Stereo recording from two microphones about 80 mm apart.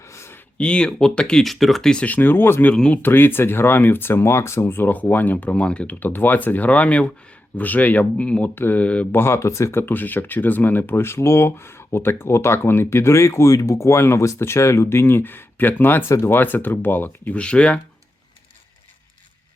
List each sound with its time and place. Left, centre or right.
0.0 s a sound: left
0.5 s speech: centre
2.0 s speech: left
2.7 s speech: centre
3.0 s speech: left
9.1 s speech: left; by 17.7 s centre